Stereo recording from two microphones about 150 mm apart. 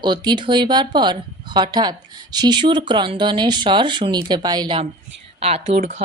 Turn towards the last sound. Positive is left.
turn(degrees=-45)  # may be behind; listen again after turning